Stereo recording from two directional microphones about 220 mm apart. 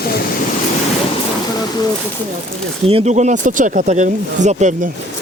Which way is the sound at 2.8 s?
30° right (ahead or behind).